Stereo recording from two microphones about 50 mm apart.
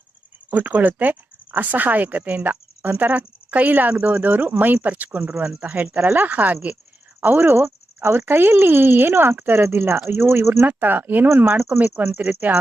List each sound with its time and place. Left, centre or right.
0.5 s speech: right
7.2 s speech: right
10.7 s speech: right
12.0 s speech: right